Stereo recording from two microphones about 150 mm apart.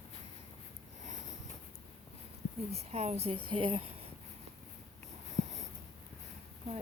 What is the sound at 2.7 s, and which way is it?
Speech, 45° right (ahead or behind).